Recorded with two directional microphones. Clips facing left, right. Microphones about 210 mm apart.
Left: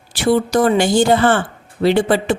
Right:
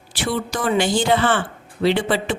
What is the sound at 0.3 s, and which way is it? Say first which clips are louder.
A man's voice: left 9 dB; 45° left (ahead or behind).